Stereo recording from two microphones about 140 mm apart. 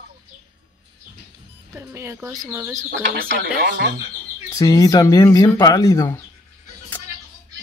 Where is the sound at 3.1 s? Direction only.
90° right.